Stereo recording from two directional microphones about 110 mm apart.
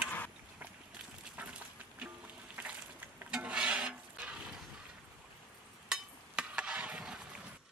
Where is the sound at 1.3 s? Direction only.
10° right (ahead or behind).